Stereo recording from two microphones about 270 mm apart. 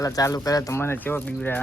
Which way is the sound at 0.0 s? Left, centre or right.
Centre.